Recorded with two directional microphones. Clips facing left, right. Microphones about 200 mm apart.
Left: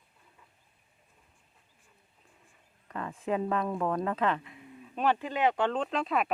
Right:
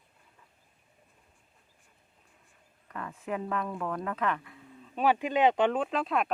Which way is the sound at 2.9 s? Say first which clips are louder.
Left 4 dB; 30° left (ahead or behind).